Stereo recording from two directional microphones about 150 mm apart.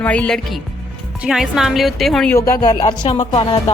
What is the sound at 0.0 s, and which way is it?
A woman's voice, 10° left (ahead or behind).